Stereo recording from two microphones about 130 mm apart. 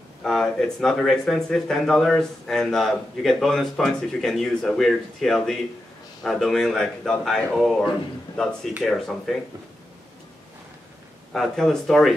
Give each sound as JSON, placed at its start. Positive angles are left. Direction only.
{"t": 0.2, "sound": "speech", "side_deg": 0}
{"t": 8.8, "sound": "speech", "side_deg": 0}
{"t": 11.3, "sound": "speech", "side_deg": 0}